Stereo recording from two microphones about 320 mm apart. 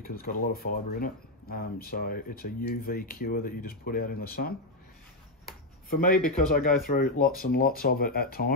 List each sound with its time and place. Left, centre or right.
0.0 s speech: left
5.9 s speech: left